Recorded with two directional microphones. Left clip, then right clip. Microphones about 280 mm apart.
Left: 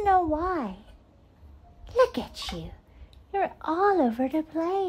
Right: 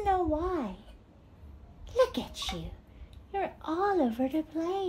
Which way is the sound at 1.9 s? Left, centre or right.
Left.